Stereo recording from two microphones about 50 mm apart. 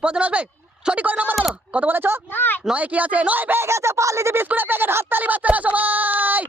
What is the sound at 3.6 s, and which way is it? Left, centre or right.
Speech, right.